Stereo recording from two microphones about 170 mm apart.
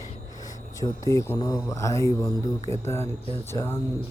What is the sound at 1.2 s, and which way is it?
Speech, 20° left (ahead or behind).